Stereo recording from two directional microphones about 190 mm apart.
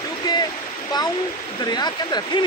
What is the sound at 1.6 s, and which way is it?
Speech, 20° left (ahead or behind).